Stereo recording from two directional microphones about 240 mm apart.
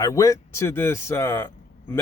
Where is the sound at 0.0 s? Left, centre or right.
Centre.